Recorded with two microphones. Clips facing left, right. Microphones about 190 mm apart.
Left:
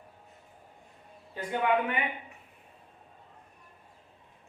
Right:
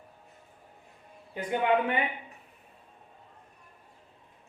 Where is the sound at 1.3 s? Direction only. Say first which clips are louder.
Right 2 dB; 20° right (ahead or behind).